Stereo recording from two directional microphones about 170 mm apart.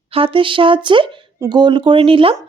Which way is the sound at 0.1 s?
30° right (ahead or behind).